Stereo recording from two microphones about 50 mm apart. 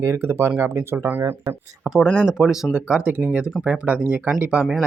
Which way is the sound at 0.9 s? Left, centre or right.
Right.